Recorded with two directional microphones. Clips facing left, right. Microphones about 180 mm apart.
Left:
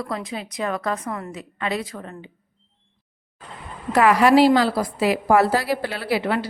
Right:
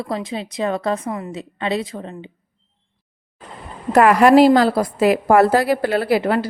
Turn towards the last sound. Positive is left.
turn(degrees=-45)  # may be behind; listen again after turning